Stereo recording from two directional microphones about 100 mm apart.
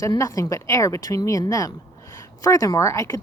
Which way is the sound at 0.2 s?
35° left (ahead or behind).